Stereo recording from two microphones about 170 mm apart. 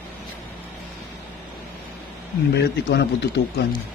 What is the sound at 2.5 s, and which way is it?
Speech, 80° left.